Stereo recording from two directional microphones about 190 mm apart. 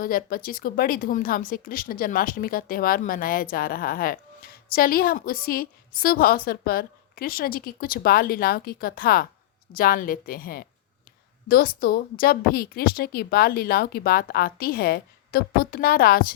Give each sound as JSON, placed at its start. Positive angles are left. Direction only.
{"t": 0.0, "sound": "speech", "side_deg": 50}